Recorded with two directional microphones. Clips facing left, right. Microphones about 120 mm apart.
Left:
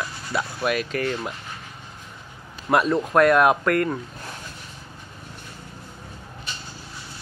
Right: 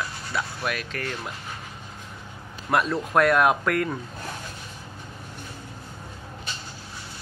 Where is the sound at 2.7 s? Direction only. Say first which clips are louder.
Left 3 dB; 10° left (ahead or behind).